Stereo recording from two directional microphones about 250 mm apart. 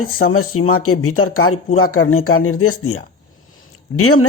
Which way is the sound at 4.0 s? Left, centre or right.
Left.